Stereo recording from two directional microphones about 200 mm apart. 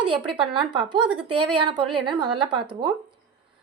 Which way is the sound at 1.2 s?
25° right (ahead or behind).